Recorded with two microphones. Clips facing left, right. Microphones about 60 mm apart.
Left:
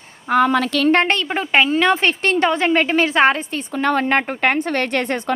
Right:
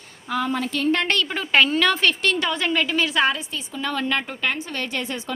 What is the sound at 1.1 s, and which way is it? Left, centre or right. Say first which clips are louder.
A woman's voice: left 3 dB; left.